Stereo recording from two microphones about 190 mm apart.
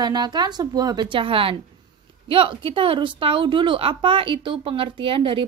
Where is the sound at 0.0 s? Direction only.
20° right (ahead or behind).